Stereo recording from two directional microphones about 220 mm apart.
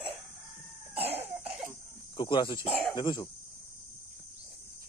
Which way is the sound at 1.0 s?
25° right (ahead or behind).